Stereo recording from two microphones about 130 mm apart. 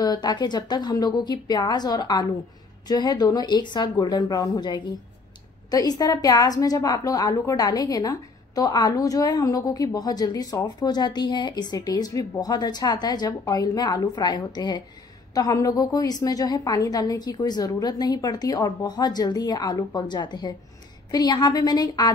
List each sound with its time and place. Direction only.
0.0 s a woman's voice: 30° left (ahead or behind)